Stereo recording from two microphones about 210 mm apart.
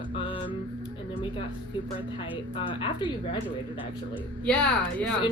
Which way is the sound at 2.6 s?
25° left (ahead or behind).